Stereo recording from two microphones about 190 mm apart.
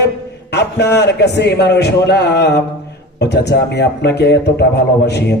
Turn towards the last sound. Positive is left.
turn(degrees=60)  # may be behind; listen again after turning